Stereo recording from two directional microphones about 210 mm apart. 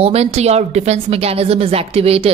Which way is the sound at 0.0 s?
30° right (ahead or behind).